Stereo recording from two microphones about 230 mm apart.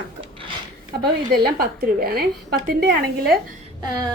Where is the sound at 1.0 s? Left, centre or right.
Right.